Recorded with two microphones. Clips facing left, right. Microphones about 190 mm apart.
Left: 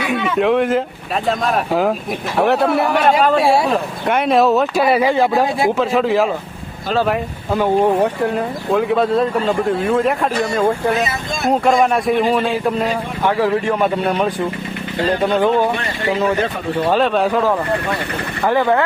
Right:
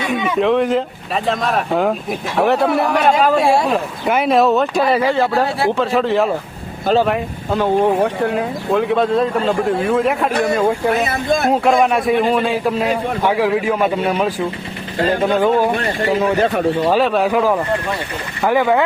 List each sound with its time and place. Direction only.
0.0 s speech: centre (ahead or behind); by 5.7 s 15° left (ahead or behind)
5.7 s speech: centre (ahead or behind)
11.0 s speech: 55° right (ahead or behind)
11.4 s speech: centre (ahead or behind)
16.8 s speech: 5° right (ahead or behind)